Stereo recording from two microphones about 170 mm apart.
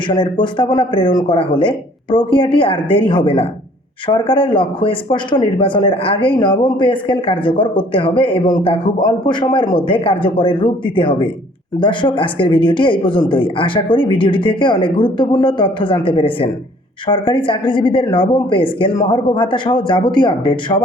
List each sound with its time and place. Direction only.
0.1 s speech: 30° left (ahead or behind)